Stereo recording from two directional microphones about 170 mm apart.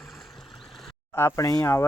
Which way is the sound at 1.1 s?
15° left (ahead or behind).